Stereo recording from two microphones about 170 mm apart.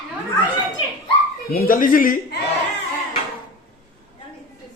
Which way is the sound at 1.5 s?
55° left (ahead or behind).